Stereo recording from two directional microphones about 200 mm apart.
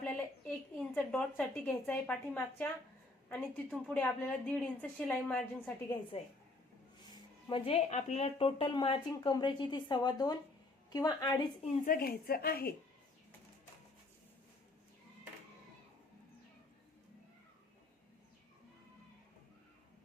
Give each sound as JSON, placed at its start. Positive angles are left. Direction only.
{"t": 0.0, "sound": "a sound", "side_deg": 5}
{"t": 3.7, "sound": "a woman's voice", "side_deg": 5}
{"t": 5.9, "sound": "speech", "side_deg": 25}
{"t": 11.9, "sound": "a woman's voice", "side_deg": 50}